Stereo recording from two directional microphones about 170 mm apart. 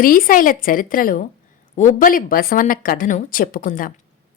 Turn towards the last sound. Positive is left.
turn(degrees=55)  # may be behind; listen again after turning